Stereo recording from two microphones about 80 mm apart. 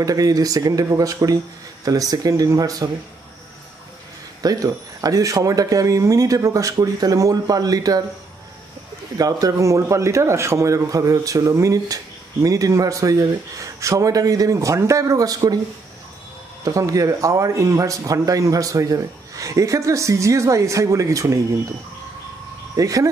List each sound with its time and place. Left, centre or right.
0.0 s a man's voice: right
4.4 s a man's voice: right
9.2 s a man's voice: right
16.6 s a man's voice: right
22.8 s a man's voice: right